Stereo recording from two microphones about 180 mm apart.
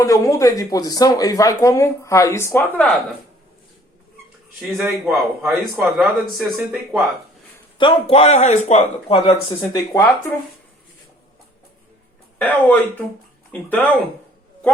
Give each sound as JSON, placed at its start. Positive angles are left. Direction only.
{"t": 0.0, "sound": "speech", "side_deg": 15}
{"t": 4.8, "sound": "a man's voice", "side_deg": 0}
{"t": 7.8, "sound": "speech", "side_deg": 30}
{"t": 12.4, "sound": "speech", "side_deg": 10}